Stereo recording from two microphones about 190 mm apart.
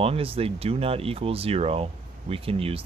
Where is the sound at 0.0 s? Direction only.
30° right (ahead or behind).